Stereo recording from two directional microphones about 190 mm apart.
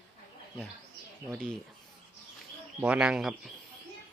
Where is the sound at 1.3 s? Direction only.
5° left (ahead or behind).